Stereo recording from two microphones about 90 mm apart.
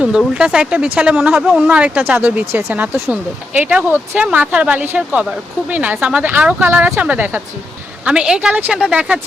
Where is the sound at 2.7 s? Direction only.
20° right (ahead or behind).